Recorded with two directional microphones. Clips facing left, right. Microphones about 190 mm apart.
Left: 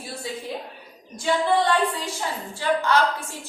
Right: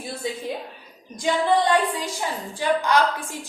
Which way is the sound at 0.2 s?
20° right (ahead or behind).